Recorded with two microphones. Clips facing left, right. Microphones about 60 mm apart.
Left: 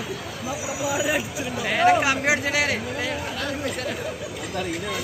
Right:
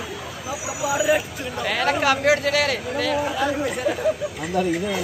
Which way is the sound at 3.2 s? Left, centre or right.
Centre.